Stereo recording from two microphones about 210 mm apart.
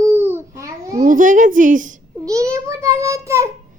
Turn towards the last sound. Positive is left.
turn(degrees=-15)  # may be behind; listen again after turning